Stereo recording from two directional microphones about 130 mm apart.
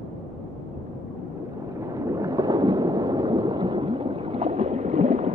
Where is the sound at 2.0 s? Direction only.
25° right (ahead or behind).